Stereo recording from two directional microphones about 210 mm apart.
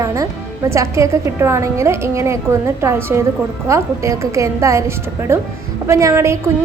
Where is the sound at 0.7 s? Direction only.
15° right (ahead or behind).